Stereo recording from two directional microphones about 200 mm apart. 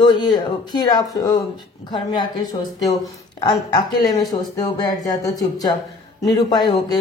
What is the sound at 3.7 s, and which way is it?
Speech, 20° left (ahead or behind).